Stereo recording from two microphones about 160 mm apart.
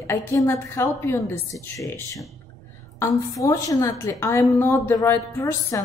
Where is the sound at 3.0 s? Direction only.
20° left (ahead or behind).